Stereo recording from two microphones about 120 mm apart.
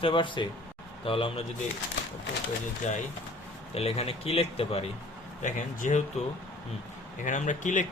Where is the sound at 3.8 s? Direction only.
55° left (ahead or behind).